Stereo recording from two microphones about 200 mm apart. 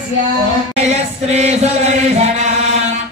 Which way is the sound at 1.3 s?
35° right (ahead or behind).